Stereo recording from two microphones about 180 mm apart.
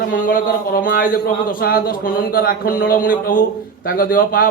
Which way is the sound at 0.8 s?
50° left (ahead or behind).